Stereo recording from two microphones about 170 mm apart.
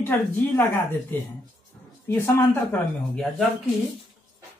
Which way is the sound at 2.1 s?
15° left (ahead or behind).